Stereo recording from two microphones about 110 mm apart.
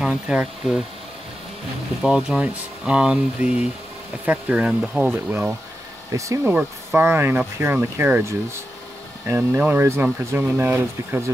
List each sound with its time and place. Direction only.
0.0 s speech: 10° right (ahead or behind)
2.0 s speech: 5° right (ahead or behind); by 6.5 s 30° right (ahead or behind)
6.5 s speech: 15° right (ahead or behind)